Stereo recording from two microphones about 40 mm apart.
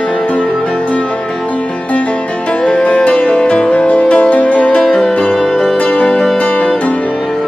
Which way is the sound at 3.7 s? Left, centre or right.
Left.